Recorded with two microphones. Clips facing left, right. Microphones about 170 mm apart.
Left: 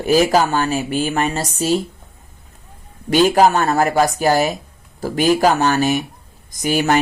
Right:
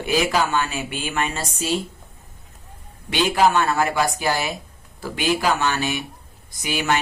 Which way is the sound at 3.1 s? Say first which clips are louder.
Left 6 dB; 45° left (ahead or behind).